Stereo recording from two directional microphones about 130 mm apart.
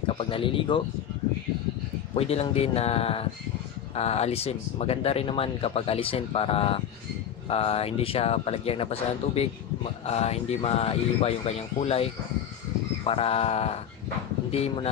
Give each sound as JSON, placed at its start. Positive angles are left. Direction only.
{"t": 0.0, "sound": "speech", "side_deg": 45}
{"t": 2.1, "sound": "speech", "side_deg": 50}